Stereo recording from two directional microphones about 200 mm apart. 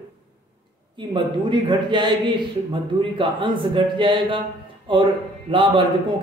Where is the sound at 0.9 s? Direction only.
25° right (ahead or behind).